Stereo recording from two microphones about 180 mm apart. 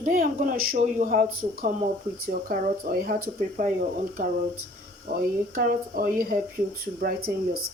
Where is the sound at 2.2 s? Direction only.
55° right (ahead or behind).